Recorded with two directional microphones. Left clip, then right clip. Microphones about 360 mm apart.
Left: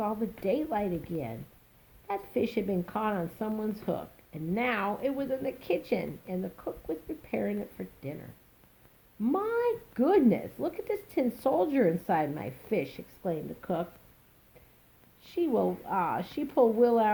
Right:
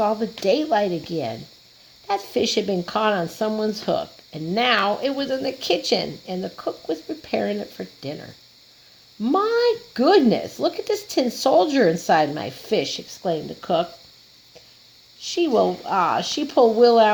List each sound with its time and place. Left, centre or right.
0.0 s speech: right
9.2 s speech: right
15.4 s speech: right